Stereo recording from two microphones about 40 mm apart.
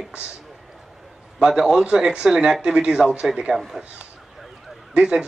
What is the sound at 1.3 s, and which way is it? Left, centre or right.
A man's voice, centre.